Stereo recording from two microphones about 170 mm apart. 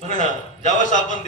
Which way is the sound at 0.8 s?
50° left (ahead or behind).